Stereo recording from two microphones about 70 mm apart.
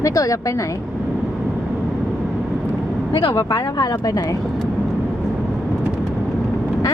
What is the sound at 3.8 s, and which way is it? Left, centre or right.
Speech, left.